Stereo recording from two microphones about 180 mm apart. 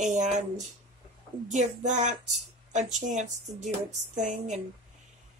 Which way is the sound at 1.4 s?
40° right (ahead or behind).